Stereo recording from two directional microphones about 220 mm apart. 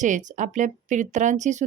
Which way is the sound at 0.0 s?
35° right (ahead or behind).